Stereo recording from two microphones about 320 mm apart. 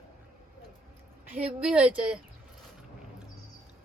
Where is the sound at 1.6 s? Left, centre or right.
Centre.